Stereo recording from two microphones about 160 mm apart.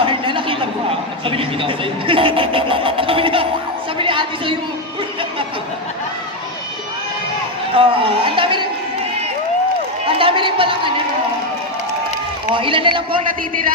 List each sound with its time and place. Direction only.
0.0 s a sound: 30° right (ahead or behind)
4.0 s a woman's voice: 30° right (ahead or behind)
7.7 s speech: 35° right (ahead or behind)
10.1 s speech: 35° right (ahead or behind)
12.5 s speech: 35° right (ahead or behind)